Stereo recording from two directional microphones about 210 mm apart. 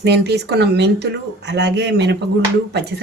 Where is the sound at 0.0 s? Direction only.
50° right (ahead or behind).